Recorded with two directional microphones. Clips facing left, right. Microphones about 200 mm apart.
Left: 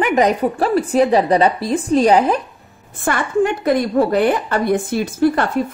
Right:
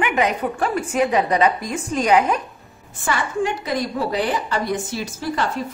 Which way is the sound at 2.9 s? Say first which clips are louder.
Left 5 dB; 55° left (ahead or behind).